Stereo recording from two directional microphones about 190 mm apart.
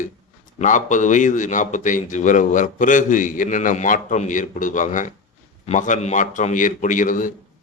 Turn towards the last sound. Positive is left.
turn(degrees=45)  # may be behind; listen again after turning